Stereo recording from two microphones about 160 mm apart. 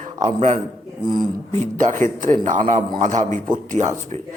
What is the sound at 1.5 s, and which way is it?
A man's voice, 50° right (ahead or behind).